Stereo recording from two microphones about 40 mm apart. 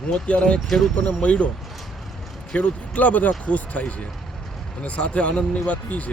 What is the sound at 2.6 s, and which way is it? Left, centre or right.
Speech, left.